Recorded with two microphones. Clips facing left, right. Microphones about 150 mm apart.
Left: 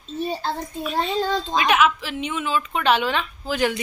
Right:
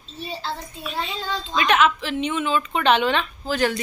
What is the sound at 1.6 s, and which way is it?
Speech, 5° left (ahead or behind).